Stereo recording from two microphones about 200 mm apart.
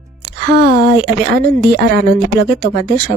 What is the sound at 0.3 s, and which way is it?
A woman's voice, 55° right (ahead or behind).